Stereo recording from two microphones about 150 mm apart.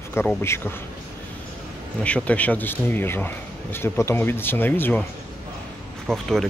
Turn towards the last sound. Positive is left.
turn(degrees=0)  # may be behind; listen again after turning